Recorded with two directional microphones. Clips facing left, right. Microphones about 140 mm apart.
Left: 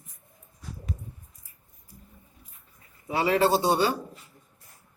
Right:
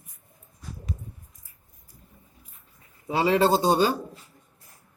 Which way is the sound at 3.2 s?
20° right (ahead or behind).